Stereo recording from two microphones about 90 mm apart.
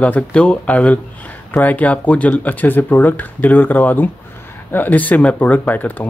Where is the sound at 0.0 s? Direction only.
15° left (ahead or behind).